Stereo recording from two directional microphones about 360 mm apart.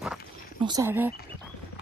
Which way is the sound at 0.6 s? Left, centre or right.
Centre.